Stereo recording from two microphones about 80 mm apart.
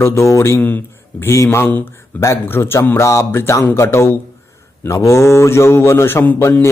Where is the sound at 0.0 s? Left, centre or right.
Left.